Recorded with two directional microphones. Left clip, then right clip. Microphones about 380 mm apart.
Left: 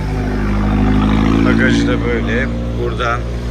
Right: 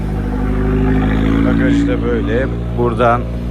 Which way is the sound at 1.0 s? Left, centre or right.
Centre.